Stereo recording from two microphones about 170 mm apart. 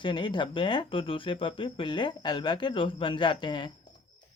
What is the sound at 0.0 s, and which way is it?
Speech, 30° left (ahead or behind).